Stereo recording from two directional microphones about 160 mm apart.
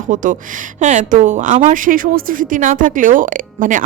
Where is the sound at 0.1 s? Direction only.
55° right (ahead or behind).